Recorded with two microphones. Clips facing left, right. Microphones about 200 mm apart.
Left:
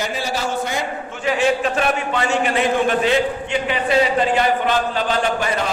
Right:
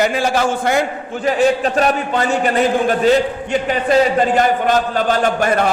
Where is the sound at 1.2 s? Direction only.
40° right (ahead or behind).